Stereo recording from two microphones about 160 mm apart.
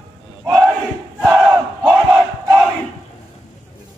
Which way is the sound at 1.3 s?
15° right (ahead or behind).